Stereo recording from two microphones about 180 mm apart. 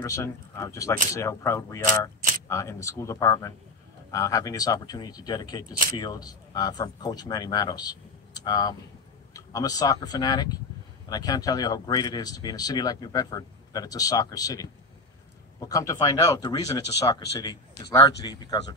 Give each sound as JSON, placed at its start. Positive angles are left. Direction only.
{"t": 0.0, "sound": "speech", "side_deg": 15}